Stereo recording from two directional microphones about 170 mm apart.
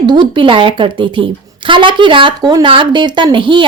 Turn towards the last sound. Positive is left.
turn(degrees=-30)  # may be behind; listen again after turning